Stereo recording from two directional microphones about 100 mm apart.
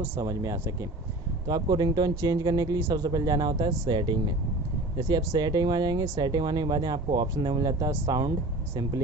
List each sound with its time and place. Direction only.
0.2 s speech: 35° right (ahead or behind)
1.5 s speech: 45° right (ahead or behind)